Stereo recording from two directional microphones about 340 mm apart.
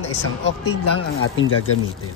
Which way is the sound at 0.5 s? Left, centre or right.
Left.